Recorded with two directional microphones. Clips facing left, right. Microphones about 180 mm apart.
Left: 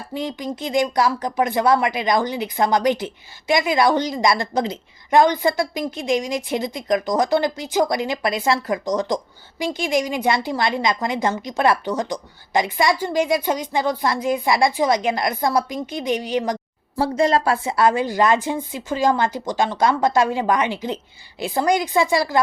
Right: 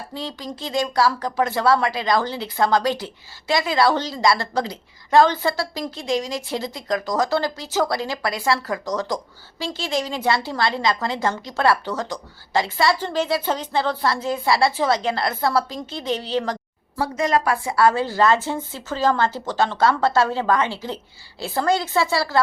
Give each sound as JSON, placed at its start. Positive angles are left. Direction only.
{"t": 0.1, "sound": "speech", "side_deg": 20}
{"t": 17.0, "sound": "speech", "side_deg": 30}